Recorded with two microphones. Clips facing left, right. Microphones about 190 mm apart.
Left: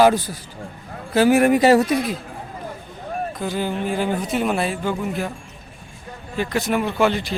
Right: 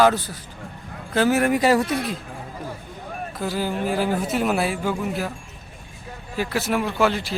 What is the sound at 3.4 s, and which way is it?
Speech, 5° right (ahead or behind).